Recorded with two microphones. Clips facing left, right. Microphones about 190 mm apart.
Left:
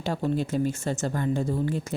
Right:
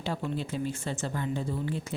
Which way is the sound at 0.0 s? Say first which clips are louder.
Left 6 dB; 45° left (ahead or behind).